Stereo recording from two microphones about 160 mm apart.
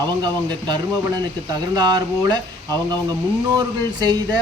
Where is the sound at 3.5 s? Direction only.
25° right (ahead or behind).